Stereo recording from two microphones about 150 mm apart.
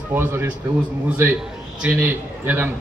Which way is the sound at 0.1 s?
15° right (ahead or behind).